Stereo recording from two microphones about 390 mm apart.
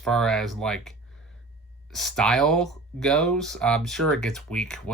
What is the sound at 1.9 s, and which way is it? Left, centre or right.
Speech, centre.